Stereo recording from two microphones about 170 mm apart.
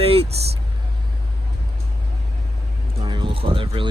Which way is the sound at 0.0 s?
35° right (ahead or behind).